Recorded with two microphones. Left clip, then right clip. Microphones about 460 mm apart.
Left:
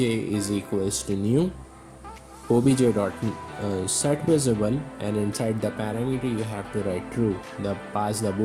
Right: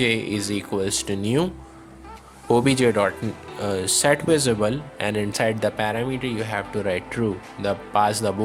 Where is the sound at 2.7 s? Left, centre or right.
Centre.